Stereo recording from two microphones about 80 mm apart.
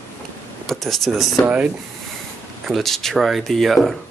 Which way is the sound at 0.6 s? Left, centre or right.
Centre.